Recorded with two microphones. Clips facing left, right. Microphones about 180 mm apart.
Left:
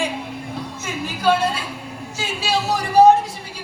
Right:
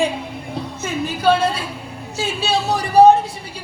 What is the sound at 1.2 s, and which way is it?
A woman's voice, 30° right (ahead or behind).